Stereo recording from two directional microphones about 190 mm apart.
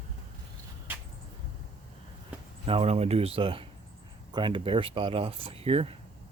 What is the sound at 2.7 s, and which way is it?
Speech, 30° right (ahead or behind).